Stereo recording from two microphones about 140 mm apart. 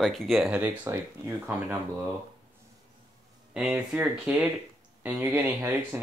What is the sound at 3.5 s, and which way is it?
Speech, 5° right (ahead or behind).